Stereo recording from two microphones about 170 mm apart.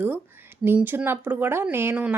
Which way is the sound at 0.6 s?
10° right (ahead or behind).